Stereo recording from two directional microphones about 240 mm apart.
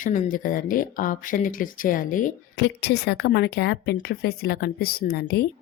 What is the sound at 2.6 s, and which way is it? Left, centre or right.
Speech, left.